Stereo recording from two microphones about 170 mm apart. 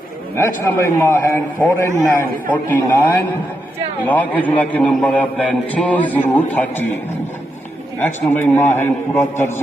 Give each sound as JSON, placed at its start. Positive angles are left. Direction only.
{"t": 0.3, "sound": "a man's voice", "side_deg": 15}
{"t": 7.9, "sound": "a man's voice", "side_deg": 10}